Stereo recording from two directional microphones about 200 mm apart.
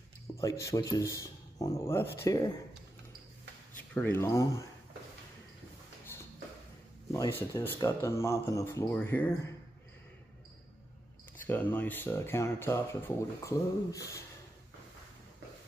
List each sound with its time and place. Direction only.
0.4 s speech: 15° left (ahead or behind)
3.9 s speech: 10° left (ahead or behind)
7.1 s speech: 15° left (ahead or behind)
11.4 s speech: 10° left (ahead or behind)